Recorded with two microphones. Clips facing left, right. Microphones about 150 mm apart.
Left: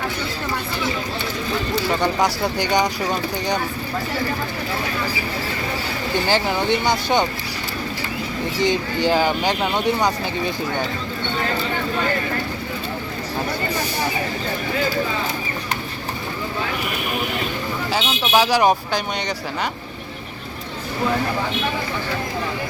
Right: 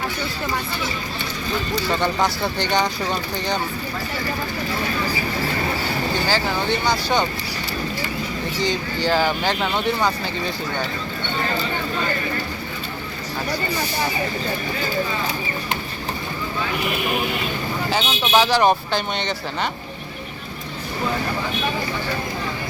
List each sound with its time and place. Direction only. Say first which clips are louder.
1.9 s speech: left 1 dB; 10° left (ahead or behind)
6.2 s speech: left 5 dB; 20° left (ahead or behind)
8.6 s speech: left 4 dB; 20° left (ahead or behind)
17.9 s speech: even; 5° left (ahead or behind)